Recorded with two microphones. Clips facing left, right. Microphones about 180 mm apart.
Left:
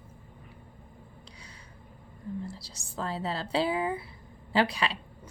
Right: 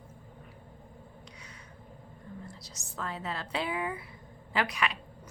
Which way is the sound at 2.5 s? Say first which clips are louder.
Left 4 dB; 30° left (ahead or behind).